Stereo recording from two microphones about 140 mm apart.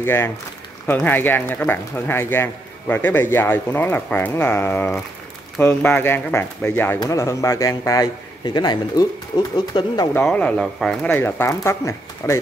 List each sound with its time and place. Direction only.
0.0 s a man's voice: 15° left (ahead or behind)
10.2 s speech: 10° left (ahead or behind)
11.1 s a man's voice: 15° left (ahead or behind)